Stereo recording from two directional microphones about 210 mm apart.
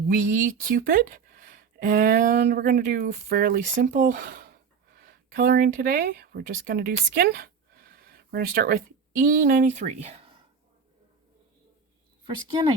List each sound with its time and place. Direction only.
0.4 s speech: 45° right (ahead or behind)
12.2 s speech: 20° right (ahead or behind)